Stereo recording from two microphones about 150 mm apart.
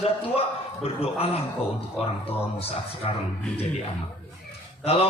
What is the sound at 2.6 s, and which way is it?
Speech, 40° left (ahead or behind).